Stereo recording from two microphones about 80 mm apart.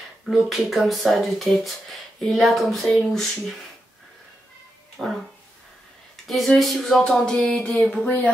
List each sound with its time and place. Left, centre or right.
0.3 s speech: centre
5.0 s speech: centre
6.2 s speech: centre
8.0 s speech: left